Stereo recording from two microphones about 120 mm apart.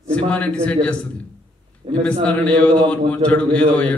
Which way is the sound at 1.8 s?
90° right.